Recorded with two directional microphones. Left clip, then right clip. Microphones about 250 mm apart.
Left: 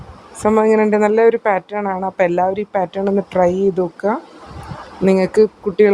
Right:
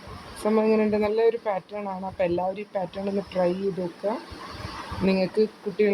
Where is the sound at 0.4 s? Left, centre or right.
Left.